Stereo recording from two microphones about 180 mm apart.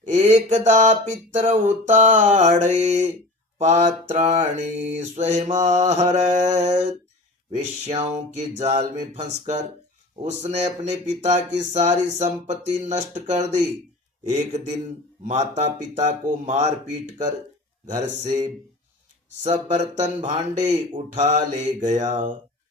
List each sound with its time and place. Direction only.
0.0 s a man's voice: 40° right (ahead or behind)